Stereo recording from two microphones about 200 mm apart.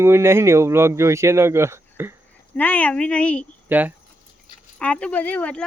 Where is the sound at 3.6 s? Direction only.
10° right (ahead or behind).